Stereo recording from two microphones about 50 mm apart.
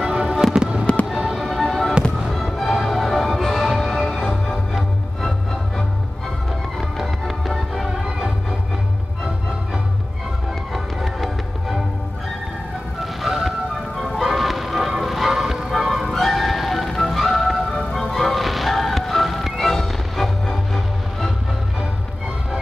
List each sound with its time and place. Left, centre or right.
0.0 s fireworks: centre
1.0 s fireworks: centre
1.5 s fireworks: centre
2.2 s music: centre
7.0 s music: centre
10.7 s music: centre
13.0 s music: centre